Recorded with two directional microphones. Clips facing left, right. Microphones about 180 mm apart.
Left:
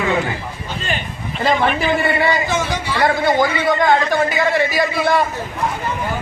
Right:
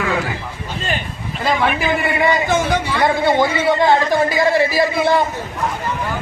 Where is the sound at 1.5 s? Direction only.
Centre (ahead or behind).